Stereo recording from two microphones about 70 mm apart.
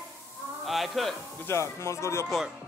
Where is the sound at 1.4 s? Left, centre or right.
Left.